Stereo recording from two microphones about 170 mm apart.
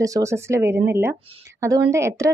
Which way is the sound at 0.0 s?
20° right (ahead or behind).